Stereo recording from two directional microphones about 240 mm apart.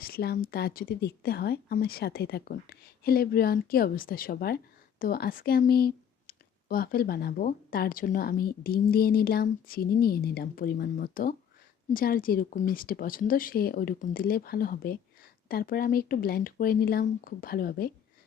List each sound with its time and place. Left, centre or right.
0.0 s speech: left